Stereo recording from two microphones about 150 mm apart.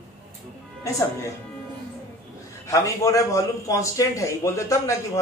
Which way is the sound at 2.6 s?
20° left (ahead or behind).